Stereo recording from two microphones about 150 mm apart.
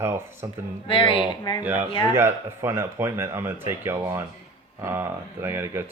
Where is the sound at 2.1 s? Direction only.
15° right (ahead or behind).